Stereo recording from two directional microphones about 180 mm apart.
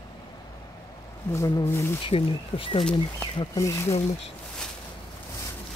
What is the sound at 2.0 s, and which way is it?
Speech, 30° left (ahead or behind).